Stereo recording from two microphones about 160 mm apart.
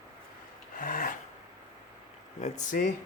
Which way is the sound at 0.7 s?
60° left (ahead or behind).